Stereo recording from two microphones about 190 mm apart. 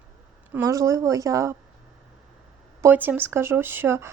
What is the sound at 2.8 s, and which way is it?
Speech, 10° right (ahead or behind).